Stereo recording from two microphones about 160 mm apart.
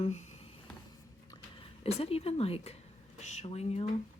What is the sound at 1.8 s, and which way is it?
Speech, 40° left (ahead or behind).